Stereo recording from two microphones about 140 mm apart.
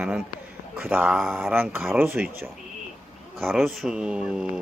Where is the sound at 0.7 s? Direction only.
15° right (ahead or behind).